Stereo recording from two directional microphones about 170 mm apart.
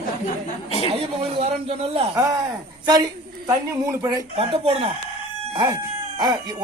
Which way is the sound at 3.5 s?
20° right (ahead or behind).